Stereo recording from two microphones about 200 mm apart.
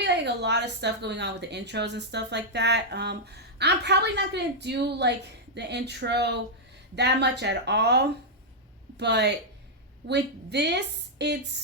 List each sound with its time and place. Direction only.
0.0 s a woman's voice: 55° right (ahead or behind)